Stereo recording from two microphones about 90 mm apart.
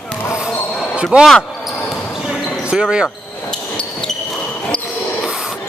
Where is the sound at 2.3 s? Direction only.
10° right (ahead or behind).